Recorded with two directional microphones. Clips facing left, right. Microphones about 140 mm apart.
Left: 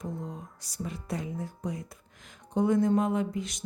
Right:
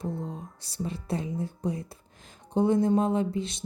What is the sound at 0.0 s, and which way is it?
Speech, 30° right (ahead or behind).